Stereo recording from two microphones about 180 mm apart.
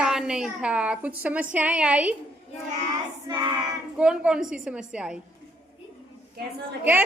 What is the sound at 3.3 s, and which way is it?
Child singing, 20° right (ahead or behind).